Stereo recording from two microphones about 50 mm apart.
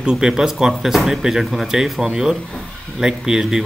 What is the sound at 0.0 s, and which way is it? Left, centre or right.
A man's voice, centre.